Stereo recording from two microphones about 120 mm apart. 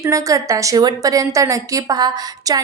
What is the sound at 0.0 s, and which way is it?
A woman's voice, 25° right (ahead or behind).